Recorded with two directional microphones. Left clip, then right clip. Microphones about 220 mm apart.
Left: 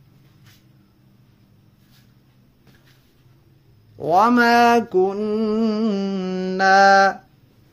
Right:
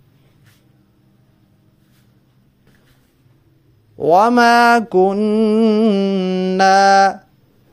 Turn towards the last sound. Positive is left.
turn(degrees=-35)  # may be behind; listen again after turning